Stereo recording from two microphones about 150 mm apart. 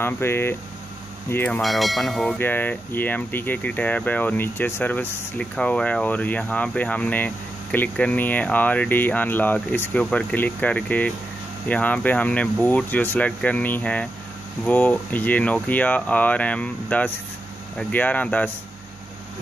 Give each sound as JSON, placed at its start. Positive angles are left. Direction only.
{"t": 0.0, "sound": "speech", "side_deg": 15}
{"t": 1.6, "sound": "speech", "side_deg": 0}
{"t": 2.3, "sound": "speech", "side_deg": 10}